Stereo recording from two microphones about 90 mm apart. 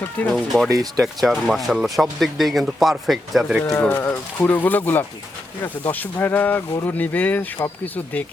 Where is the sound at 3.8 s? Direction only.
20° left (ahead or behind).